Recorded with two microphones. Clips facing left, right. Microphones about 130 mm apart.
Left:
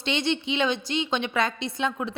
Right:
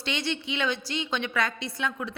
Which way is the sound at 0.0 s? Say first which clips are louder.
Left 5 dB; 20° left (ahead or behind).